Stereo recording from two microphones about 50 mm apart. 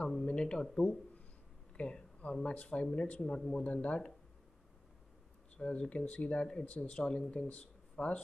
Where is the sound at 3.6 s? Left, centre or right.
Left.